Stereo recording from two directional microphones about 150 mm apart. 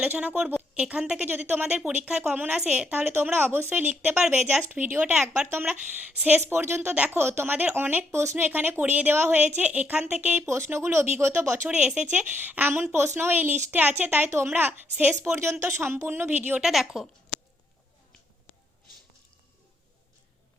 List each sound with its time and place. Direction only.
0.0 s a woman's voice: 10° right (ahead or behind)
11.8 s a woman's voice: 5° right (ahead or behind)
16.6 s a woman's voice: centre (ahead or behind)